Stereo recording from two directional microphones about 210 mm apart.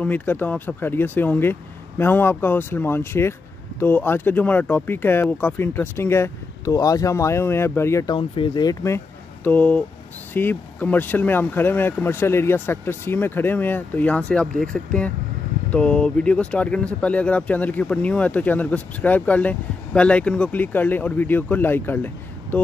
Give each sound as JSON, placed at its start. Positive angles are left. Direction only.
{"t": 0.0, "sound": "speech", "side_deg": 10}